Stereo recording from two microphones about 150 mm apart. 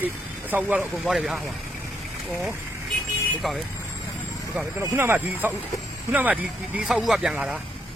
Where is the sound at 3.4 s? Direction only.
Centre (ahead or behind).